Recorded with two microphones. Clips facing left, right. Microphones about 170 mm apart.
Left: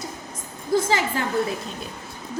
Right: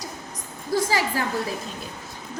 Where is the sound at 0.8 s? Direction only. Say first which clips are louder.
Left 1 dB; 25° left (ahead or behind).